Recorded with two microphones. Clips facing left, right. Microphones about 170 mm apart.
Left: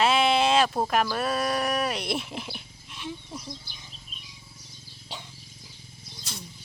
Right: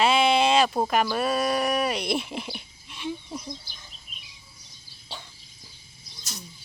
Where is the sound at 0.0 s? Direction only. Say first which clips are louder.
Right 1 dB; centre (ahead or behind).